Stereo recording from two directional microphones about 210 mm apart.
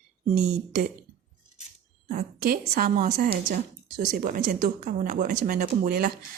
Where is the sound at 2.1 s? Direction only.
40° right (ahead or behind).